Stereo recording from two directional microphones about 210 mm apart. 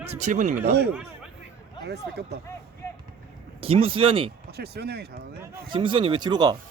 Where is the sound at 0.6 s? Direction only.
50° right (ahead or behind).